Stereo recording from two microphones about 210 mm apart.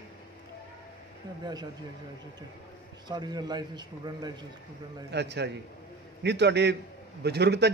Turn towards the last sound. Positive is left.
turn(degrees=-50)  # may be behind; listen again after turning